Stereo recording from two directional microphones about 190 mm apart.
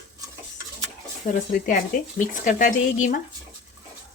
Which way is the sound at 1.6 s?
45° left (ahead or behind).